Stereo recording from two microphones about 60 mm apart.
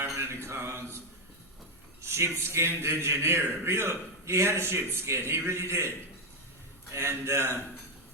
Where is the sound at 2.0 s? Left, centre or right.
Right.